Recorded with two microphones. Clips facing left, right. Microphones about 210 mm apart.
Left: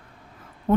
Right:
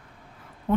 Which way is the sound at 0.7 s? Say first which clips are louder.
Left 3 dB; 40° left (ahead or behind).